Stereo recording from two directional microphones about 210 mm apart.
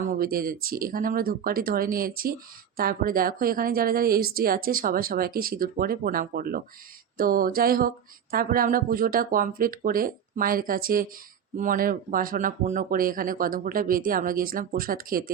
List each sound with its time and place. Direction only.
0.2 s a woman's voice: 45° right (ahead or behind)